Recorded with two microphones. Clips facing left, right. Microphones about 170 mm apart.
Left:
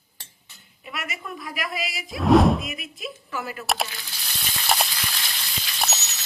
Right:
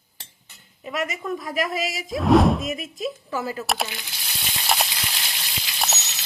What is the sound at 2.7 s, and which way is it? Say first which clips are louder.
Speech: right 7 dB; 40° right (ahead or behind).